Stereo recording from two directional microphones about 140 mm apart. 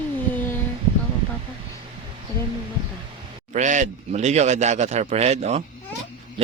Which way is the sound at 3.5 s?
60° right (ahead or behind).